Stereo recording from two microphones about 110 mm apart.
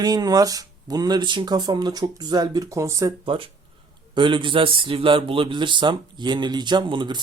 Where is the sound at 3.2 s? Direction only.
55° right (ahead or behind).